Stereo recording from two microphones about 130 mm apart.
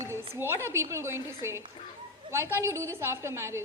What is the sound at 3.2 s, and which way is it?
Speech, 20° right (ahead or behind).